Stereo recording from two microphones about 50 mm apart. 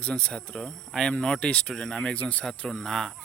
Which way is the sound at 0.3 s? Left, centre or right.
Centre.